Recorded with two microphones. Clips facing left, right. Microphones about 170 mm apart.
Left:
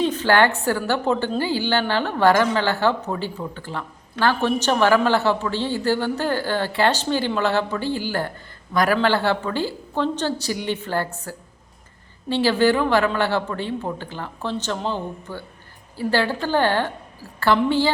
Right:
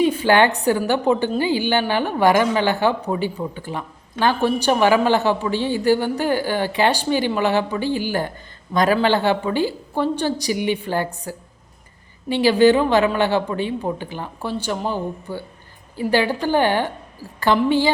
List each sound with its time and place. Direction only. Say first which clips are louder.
0.0 s a woman's voice: right 2 dB; 10° right (ahead or behind)